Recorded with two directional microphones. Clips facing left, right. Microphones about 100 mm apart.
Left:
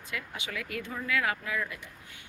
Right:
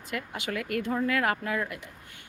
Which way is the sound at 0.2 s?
50° right (ahead or behind).